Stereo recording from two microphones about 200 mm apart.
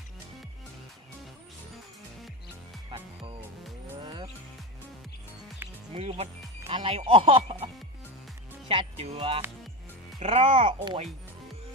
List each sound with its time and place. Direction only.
4.0 s music: 25° right (ahead or behind)
5.9 s speech: 30° right (ahead or behind)